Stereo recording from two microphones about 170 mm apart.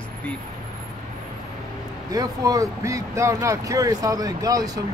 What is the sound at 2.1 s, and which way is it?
Speech, 20° right (ahead or behind).